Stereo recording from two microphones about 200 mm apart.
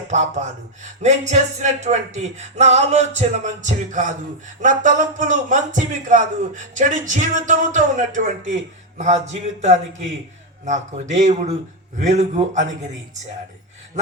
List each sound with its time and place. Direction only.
0.1 s speech: 35° right (ahead or behind)